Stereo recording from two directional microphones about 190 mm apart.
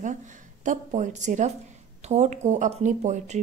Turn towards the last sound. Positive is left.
turn(degrees=-40)  # may be behind; listen again after turning